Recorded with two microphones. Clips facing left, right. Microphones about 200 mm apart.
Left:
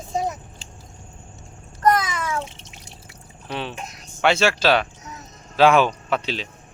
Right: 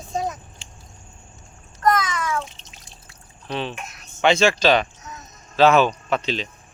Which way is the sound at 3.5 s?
10° left (ahead or behind).